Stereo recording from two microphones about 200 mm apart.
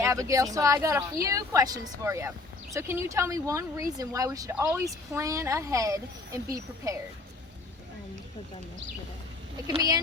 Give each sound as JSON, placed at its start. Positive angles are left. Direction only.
{"t": 0.0, "sound": "speech", "side_deg": -15}